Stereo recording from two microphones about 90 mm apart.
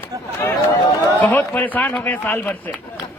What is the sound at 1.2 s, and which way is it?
A man's voice, 20° left (ahead or behind).